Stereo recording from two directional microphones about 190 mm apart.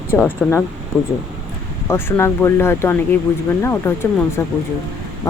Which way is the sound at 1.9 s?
10° left (ahead or behind).